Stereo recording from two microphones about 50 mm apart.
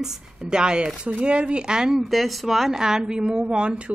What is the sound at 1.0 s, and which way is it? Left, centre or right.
A woman's voice, right.